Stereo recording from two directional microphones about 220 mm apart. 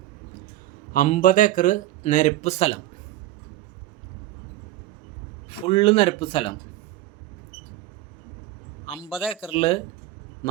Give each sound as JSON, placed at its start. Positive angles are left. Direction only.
{"t": 0.9, "sound": "speech", "side_deg": 35}
{"t": 5.5, "sound": "speech", "side_deg": 25}
{"t": 9.0, "sound": "a man's voice", "side_deg": -5}
{"t": 9.5, "sound": "speech", "side_deg": 25}